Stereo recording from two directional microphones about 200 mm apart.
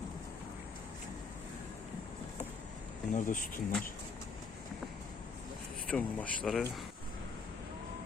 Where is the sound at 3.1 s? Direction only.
40° left (ahead or behind).